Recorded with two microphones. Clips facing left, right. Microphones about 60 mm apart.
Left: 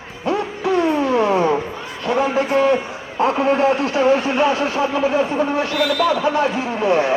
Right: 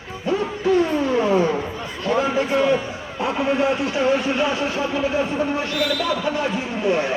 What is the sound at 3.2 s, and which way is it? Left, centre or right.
A man's voice, left.